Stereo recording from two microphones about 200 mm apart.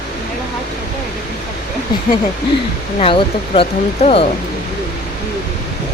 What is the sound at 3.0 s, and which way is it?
Speech, 30° left (ahead or behind).